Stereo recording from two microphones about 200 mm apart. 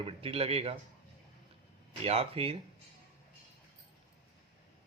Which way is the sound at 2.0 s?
30° right (ahead or behind).